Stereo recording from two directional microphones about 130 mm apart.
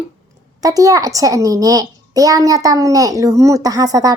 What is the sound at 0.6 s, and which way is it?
A child's voice, 25° right (ahead or behind).